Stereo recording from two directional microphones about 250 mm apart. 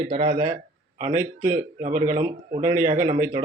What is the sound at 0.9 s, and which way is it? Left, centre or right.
A man's voice, right.